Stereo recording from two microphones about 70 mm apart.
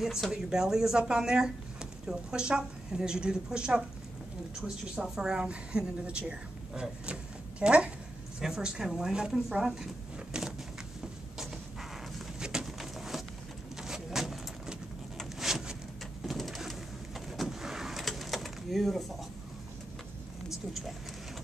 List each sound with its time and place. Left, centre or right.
0.0 s speech: centre
4.9 s a woman's voice: centre
12.4 s pigeon: centre
13.7 s vehicle: centre
16.3 s bird: centre
20.4 s a sound: centre